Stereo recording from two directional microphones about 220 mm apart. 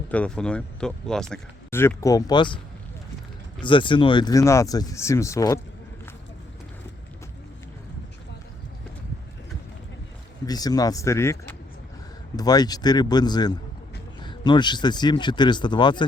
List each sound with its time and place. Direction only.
0.1 s speech: 5° left (ahead or behind); by 2.6 s 20° left (ahead or behind)
3.6 s speech: 20° left (ahead or behind)
10.4 s speech: 15° left (ahead or behind)